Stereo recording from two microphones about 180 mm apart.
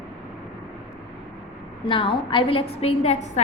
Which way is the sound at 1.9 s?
30° left (ahead or behind).